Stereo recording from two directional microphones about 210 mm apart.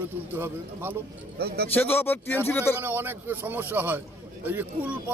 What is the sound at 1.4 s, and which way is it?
Speech, 50° right (ahead or behind).